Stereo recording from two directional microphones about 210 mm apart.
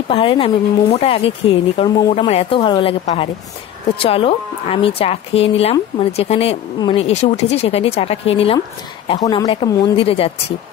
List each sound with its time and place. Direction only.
0.1 s a woman's voice: 25° left (ahead or behind)